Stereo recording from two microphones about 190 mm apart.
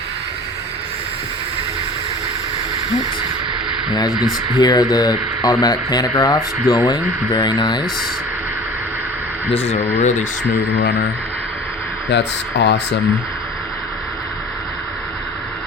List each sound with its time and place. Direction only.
4.6 s speech: 20° left (ahead or behind)
9.5 s speech: 30° left (ahead or behind)
12.1 s speech: 65° left (ahead or behind)